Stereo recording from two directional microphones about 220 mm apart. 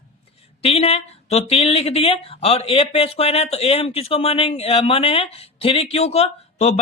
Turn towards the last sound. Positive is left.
turn(degrees=30)  # may be behind; listen again after turning